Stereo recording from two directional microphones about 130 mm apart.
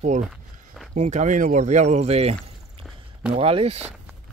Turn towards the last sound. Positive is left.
turn(degrees=-50)  # may be behind; listen again after turning